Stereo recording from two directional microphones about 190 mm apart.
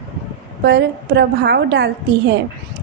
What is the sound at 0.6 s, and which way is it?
A woman's voice, 60° right (ahead or behind).